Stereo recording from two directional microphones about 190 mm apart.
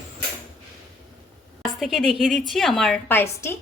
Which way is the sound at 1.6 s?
Centre (ahead or behind).